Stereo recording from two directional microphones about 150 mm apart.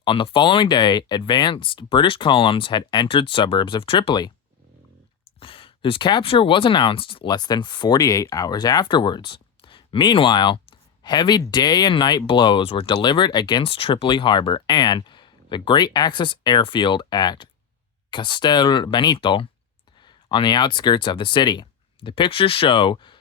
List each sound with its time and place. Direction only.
0.0 s speech: 35° left (ahead or behind)
5.4 s speech: 35° left (ahead or behind)